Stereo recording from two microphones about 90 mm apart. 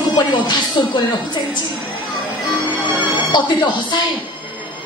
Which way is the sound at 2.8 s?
60° left (ahead or behind).